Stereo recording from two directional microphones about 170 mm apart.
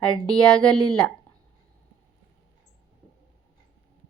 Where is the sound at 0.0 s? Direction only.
5° left (ahead or behind).